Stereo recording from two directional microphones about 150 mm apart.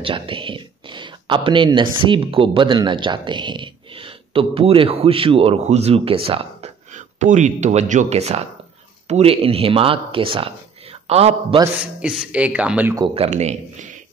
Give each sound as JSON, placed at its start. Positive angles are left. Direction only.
{"t": 0.0, "sound": "speech", "side_deg": -35}
{"t": 7.2, "sound": "a man's voice", "side_deg": -50}
{"t": 11.8, "sound": "speech", "side_deg": -5}
{"t": 13.1, "sound": "speech", "side_deg": -45}